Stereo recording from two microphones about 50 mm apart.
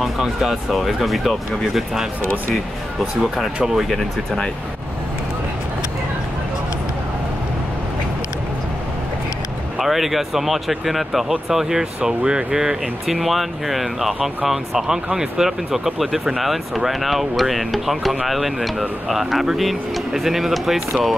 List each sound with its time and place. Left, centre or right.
0.0 s speech: centre
9.8 s speech: centre
13.0 s speech: centre